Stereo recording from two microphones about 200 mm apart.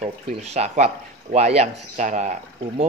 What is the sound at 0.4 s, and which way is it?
A man's voice, 35° right (ahead or behind).